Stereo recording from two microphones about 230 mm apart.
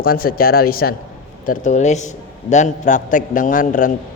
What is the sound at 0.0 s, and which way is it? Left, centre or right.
Speech, left.